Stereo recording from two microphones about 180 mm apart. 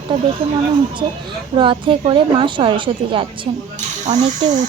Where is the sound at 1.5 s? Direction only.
30° right (ahead or behind).